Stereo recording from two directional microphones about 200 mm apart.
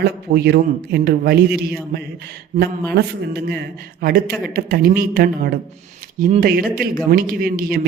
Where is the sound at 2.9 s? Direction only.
55° right (ahead or behind).